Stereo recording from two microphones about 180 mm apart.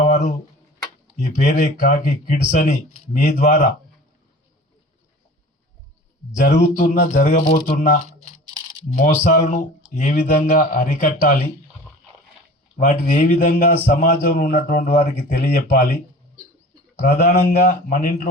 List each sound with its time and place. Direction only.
0.0 s a sound: 45° left (ahead or behind)
1.4 s speech: 45° left (ahead or behind)
6.4 s speech: 45° left (ahead or behind)
12.7 s speech: 45° left (ahead or behind)
14.3 s a man's voice: 65° left (ahead or behind)
14.8 s speech: 45° left (ahead or behind)
17.2 s speech: 45° left (ahead or behind)